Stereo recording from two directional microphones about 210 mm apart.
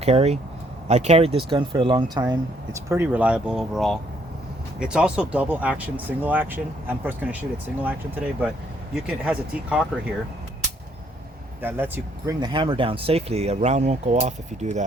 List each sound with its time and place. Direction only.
0.0 s speech: 30° right (ahead or behind); by 9.8 s 5° right (ahead or behind)
11.6 s speech: 10° right (ahead or behind)
12.4 s speech: 20° right (ahead or behind)